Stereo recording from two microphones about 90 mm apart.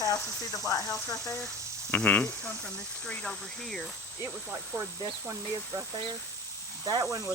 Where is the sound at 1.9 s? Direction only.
15° left (ahead or behind).